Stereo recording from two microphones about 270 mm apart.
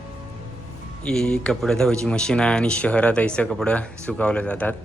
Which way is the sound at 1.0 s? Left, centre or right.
Centre.